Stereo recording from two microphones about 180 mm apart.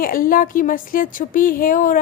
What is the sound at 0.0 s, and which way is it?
Speech, 50° left (ahead or behind).